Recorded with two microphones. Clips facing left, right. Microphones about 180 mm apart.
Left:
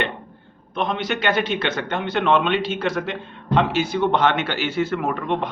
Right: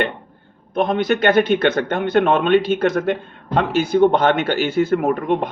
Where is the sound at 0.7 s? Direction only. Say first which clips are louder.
Right 6 dB; 50° right (ahead or behind).